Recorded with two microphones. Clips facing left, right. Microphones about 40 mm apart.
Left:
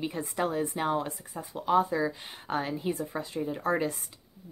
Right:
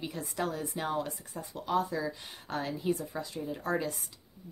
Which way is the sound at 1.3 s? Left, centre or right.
Centre.